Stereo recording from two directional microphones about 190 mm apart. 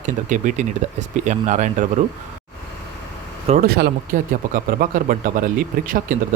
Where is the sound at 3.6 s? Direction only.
55° right (ahead or behind).